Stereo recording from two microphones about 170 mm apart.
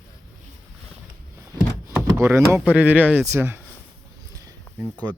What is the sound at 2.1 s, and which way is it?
Speech, 15° right (ahead or behind).